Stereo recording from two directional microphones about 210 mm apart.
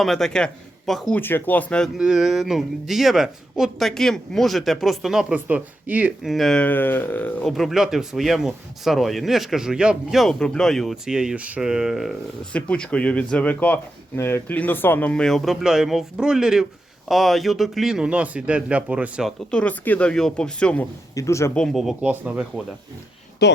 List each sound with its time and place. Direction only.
0.0 s speech: centre (ahead or behind)
23.4 s speech: 50° left (ahead or behind)